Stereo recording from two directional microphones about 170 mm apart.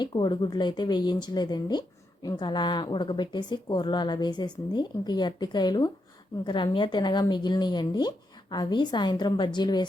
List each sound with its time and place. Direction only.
0.0 s a woman's voice: 25° left (ahead or behind)